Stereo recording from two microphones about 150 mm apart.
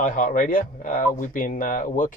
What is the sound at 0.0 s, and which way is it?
Speech, 65° left (ahead or behind).